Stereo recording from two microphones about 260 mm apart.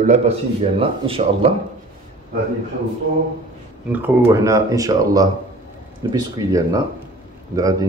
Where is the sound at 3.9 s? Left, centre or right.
Centre.